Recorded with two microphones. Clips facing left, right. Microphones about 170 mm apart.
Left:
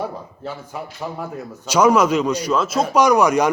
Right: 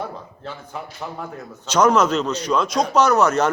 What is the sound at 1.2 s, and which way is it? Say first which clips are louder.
Speech: left 3 dB; 10° left (ahead or behind).